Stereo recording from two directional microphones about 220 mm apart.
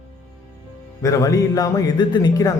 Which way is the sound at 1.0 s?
15° left (ahead or behind).